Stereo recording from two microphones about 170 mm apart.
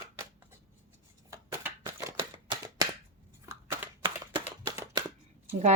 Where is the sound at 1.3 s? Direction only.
20° right (ahead or behind).